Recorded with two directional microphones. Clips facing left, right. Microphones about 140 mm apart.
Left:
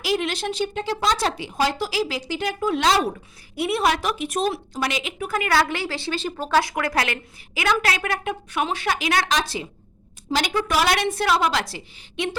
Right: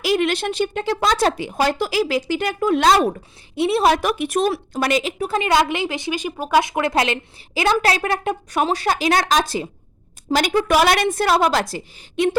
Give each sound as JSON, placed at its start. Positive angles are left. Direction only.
{"t": 0.0, "sound": "a woman's voice", "side_deg": -55}
{"t": 3.5, "sound": "a woman's voice", "side_deg": -30}
{"t": 3.9, "sound": "a woman's voice", "side_deg": -55}